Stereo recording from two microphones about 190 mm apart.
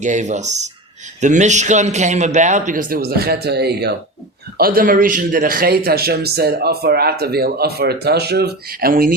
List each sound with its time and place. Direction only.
0.0 s a man's voice: 40° right (ahead or behind)